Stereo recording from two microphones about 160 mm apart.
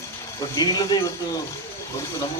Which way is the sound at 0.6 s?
25° left (ahead or behind).